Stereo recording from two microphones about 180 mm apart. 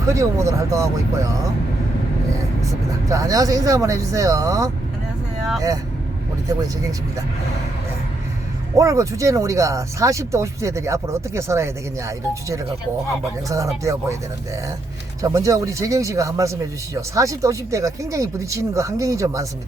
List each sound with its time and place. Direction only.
0.1 s speech: 15° right (ahead or behind)
3.1 s speech: 20° right (ahead or behind)
8.8 s speech: 20° right (ahead or behind)
15.2 s speech: 20° right (ahead or behind)